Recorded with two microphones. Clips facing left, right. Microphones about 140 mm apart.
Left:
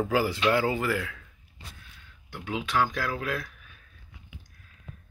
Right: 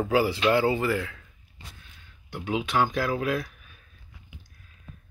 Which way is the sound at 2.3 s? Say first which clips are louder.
Right 3 dB; 15° right (ahead or behind).